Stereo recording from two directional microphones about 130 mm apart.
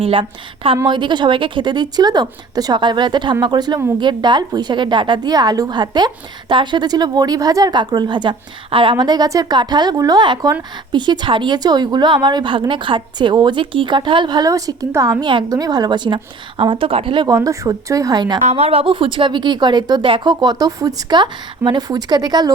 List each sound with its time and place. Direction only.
0.0 s a woman's voice: 45° right (ahead or behind)
17.2 s a woman's voice: 25° right (ahead or behind)
18.3 s a woman's voice: 55° right (ahead or behind); by 22.5 s 30° right (ahead or behind)